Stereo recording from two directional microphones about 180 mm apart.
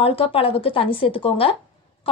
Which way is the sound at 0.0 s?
30° left (ahead or behind).